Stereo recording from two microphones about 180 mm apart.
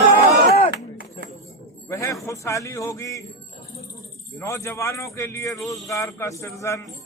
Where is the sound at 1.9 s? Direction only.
15° left (ahead or behind).